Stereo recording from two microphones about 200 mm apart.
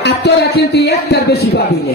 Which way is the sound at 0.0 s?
55° left (ahead or behind).